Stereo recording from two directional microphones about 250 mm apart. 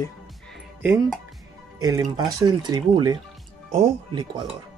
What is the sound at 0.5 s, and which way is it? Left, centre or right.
Music, centre.